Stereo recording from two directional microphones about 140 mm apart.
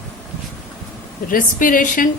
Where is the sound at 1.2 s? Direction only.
75° left (ahead or behind).